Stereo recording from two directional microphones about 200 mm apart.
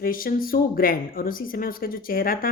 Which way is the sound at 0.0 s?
45° left (ahead or behind).